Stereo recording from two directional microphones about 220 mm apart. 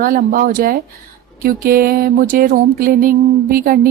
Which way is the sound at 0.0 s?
40° right (ahead or behind).